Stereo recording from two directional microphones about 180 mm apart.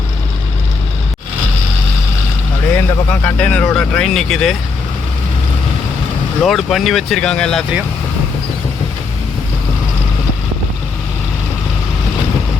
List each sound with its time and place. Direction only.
2.7 s speech: 10° left (ahead or behind)
6.4 s speech: centre (ahead or behind)